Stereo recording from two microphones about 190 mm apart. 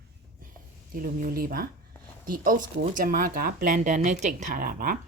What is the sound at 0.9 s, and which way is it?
Speech, 50° right (ahead or behind).